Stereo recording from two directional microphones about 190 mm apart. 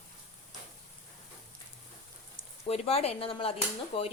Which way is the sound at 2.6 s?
30° left (ahead or behind).